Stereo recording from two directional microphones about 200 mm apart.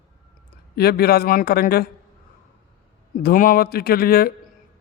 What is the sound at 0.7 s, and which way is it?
Speech, 50° left (ahead or behind).